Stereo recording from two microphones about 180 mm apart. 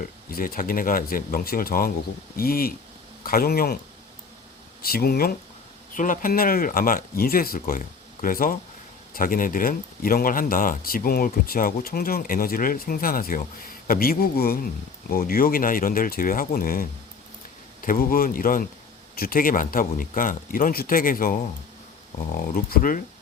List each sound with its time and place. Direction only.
0.0 s speech: 55° left (ahead or behind)
4.8 s speech: 55° left (ahead or behind)
22.4 s speech: 50° left (ahead or behind)